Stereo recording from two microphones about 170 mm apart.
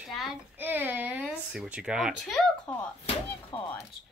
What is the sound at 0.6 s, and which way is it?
A child's voice, 10° right (ahead or behind).